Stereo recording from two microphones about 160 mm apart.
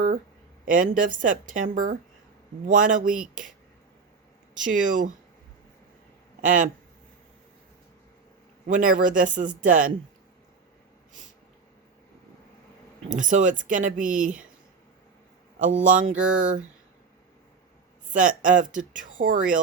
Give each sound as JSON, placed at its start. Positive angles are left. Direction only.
{"t": 0.6, "sound": "speech", "side_deg": -55}
{"t": 4.5, "sound": "speech", "side_deg": -55}
{"t": 6.4, "sound": "speech", "side_deg": -55}
{"t": 8.6, "sound": "speech", "side_deg": -55}
{"t": 13.1, "sound": "speech", "side_deg": -55}
{"t": 15.5, "sound": "speech", "side_deg": -55}
{"t": 18.1, "sound": "speech", "side_deg": -55}